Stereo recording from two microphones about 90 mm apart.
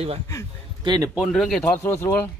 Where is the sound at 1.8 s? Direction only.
25° left (ahead or behind).